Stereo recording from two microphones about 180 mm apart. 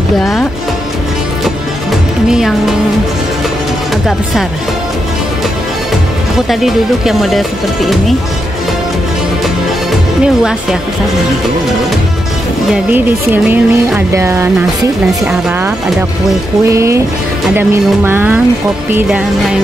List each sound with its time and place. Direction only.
0.2 s speech: centre (ahead or behind)
2.2 s speech: 5° right (ahead or behind)
6.3 s speech: centre (ahead or behind)
10.2 s speech: 5° right (ahead or behind)
12.7 s speech: 10° right (ahead or behind)
16.6 s speech: 15° right (ahead or behind)